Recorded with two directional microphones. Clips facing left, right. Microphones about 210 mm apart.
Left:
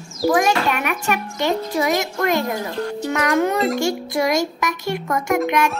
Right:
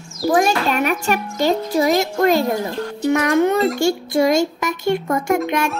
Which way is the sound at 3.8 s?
30° right (ahead or behind).